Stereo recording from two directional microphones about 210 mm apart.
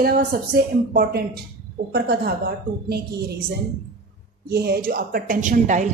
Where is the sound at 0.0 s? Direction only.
45° right (ahead or behind).